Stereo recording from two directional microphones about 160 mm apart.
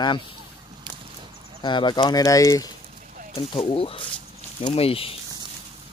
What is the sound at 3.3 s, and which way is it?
Speech, 35° left (ahead or behind).